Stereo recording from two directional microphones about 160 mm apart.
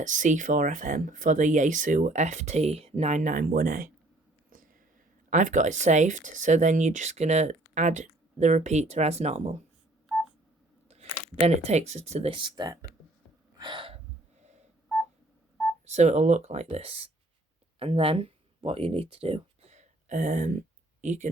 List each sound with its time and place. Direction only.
0.0 s speech: 50° right (ahead or behind)
4.4 s a sound: 55° right (ahead or behind)
5.3 s speech: 50° right (ahead or behind)
10.8 s speech: 40° right (ahead or behind)
13.6 s hiccup: 30° right (ahead or behind)
15.9 s speech: 45° right (ahead or behind)
17.7 s a sound: 35° right (ahead or behind); by 21.2 s 50° right (ahead or behind)